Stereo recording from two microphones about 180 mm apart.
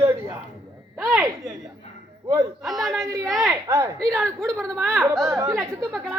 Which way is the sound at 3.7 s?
15° right (ahead or behind).